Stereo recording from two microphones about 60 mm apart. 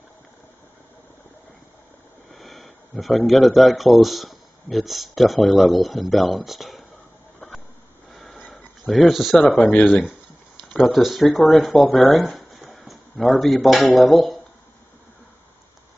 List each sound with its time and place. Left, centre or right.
2.3 s speech: centre
8.1 s a sound: centre
8.8 s speech: centre
9.6 s speech: left
10.7 s speech: centre
12.6 s a sound: centre
13.9 s speech: centre